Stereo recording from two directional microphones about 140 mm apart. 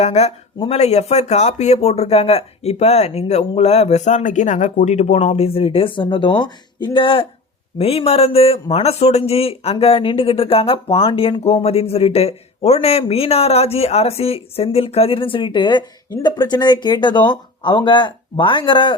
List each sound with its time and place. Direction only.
0.0 s speech: 50° left (ahead or behind)